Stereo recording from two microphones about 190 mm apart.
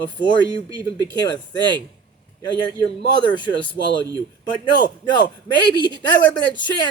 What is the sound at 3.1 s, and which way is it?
Speech, 25° left (ahead or behind).